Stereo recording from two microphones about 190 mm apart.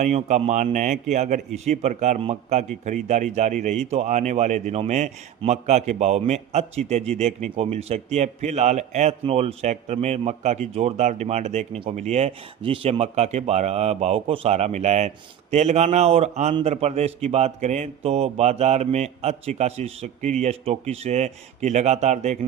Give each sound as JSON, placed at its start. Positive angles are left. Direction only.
{"t": 0.0, "sound": "a man's voice", "side_deg": -35}